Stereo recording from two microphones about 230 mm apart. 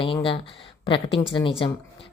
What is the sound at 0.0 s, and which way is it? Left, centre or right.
A woman's voice, left.